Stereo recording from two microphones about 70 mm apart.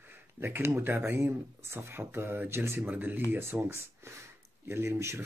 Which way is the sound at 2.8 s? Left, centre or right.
Right.